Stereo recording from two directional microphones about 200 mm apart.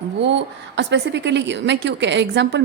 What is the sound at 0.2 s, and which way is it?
A woman's voice, 60° right (ahead or behind).